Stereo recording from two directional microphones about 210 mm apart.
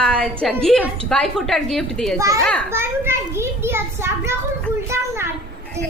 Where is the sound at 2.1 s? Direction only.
15° right (ahead or behind).